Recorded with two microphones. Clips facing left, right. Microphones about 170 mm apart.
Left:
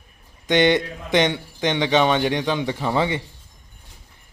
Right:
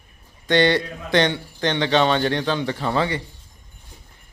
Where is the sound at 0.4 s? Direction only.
20° left (ahead or behind).